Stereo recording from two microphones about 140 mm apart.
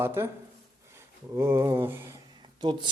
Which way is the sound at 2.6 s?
35° right (ahead or behind).